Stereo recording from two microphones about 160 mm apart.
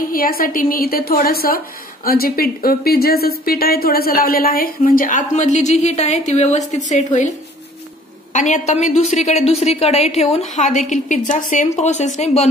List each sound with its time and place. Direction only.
0.1 s a woman's voice: 65° left (ahead or behind); by 12.4 s 45° left (ahead or behind)